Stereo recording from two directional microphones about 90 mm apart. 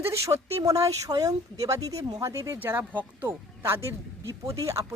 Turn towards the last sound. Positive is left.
turn(degrees=-35)  # may be behind; listen again after turning